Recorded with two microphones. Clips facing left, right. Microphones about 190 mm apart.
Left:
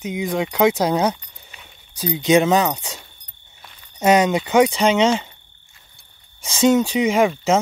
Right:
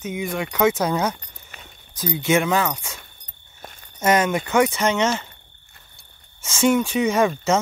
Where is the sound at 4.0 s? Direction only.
15° left (ahead or behind).